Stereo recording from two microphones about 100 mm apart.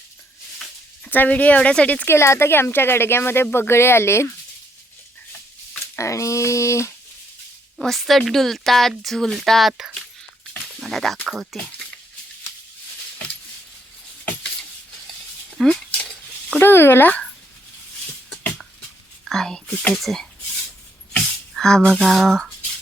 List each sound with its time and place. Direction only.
1.0 s speech: 15° left (ahead or behind)
2.1 s speech: 30° left (ahead or behind)
6.0 s speech: 30° left (ahead or behind)
7.8 s a woman's voice: centre (ahead or behind)
10.8 s a sound: centre (ahead or behind)
11.2 s a woman's voice: centre (ahead or behind)
15.6 s a sound: 5° left (ahead or behind)
16.6 s speech: 20° left (ahead or behind)
19.2 s a woman's voice: 5° left (ahead or behind)
21.5 s a sound: 5° left (ahead or behind)
22.0 s a woman's voice: centre (ahead or behind)